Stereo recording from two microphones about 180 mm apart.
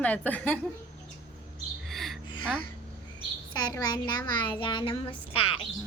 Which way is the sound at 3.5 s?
20° left (ahead or behind).